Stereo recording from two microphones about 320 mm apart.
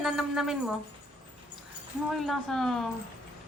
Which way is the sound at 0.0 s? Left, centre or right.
Centre.